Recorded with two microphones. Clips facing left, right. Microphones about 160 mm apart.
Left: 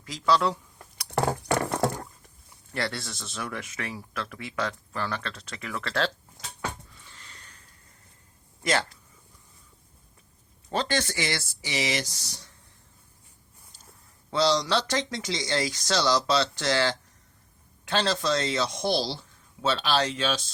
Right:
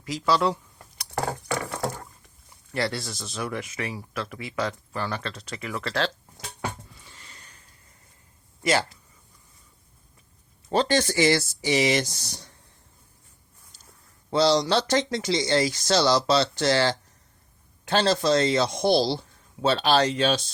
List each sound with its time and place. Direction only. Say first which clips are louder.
0.0 s speech: right 1 dB; 10° right (ahead or behind)
1.1 s a sound: left 3 dB; 60° left (ahead or behind)
2.7 s speech: right 4 dB; 5° right (ahead or behind)
7.0 s sniff: right 1 dB; 15° right (ahead or behind)
8.6 s speech: right 3 dB; 5° right (ahead or behind)
10.8 s speech: right 6 dB; 35° right (ahead or behind); by 12.4 s 50° right (ahead or behind)
14.3 s speech: right 3 dB; 30° right (ahead or behind); by 20.4 s 55° right (ahead or behind)